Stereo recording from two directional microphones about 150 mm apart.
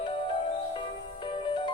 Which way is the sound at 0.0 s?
35° left (ahead or behind).